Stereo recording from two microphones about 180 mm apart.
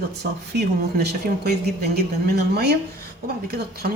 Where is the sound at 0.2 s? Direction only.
65° right (ahead or behind).